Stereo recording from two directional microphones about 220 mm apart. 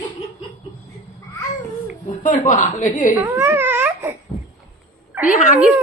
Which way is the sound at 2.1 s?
35° left (ahead or behind).